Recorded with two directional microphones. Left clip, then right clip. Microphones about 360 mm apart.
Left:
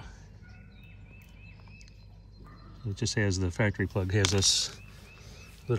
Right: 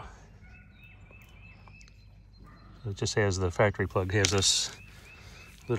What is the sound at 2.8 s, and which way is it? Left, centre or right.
Speech, centre.